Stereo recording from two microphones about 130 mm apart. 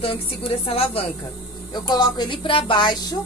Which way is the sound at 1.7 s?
35° left (ahead or behind).